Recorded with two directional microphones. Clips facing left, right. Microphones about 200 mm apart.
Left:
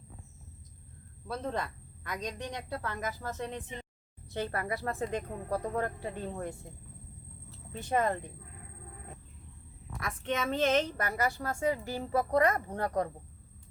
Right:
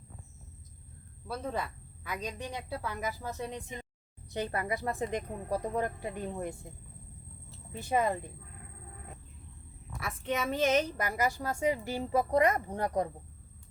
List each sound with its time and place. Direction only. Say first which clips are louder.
1.3 s a woman's voice: left 1 dB; 5° right (ahead or behind)
7.7 s a woman's voice: even; 10° right (ahead or behind)
10.0 s a woman's voice: even; 5° right (ahead or behind)